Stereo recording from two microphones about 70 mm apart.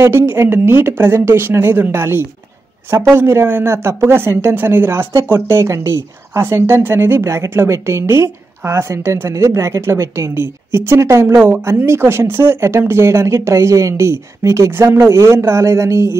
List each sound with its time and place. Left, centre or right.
0.0 s a woman's voice: right
6.4 s a woman's voice: right